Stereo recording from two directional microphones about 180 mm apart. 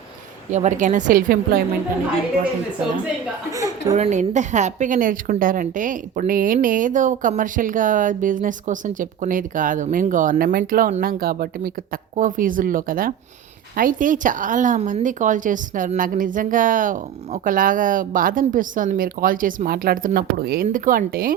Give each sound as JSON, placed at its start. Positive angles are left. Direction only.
{"t": 0.5, "sound": "a woman's voice", "side_deg": -40}
{"t": 3.5, "sound": "a woman's voice", "side_deg": -20}
{"t": 3.9, "sound": "a woman's voice", "side_deg": -40}